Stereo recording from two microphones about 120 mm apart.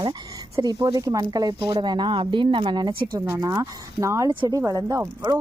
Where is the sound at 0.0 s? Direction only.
35° right (ahead or behind).